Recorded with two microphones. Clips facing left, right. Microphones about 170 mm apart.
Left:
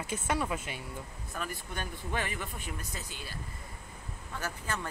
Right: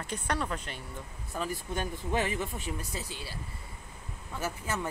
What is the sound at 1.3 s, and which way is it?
Speech, 20° right (ahead or behind).